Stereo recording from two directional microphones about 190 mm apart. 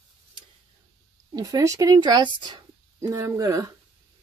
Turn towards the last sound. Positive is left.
turn(degrees=-15)  # may be behind; listen again after turning